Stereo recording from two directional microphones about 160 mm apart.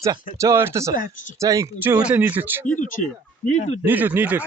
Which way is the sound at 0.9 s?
55° left (ahead or behind).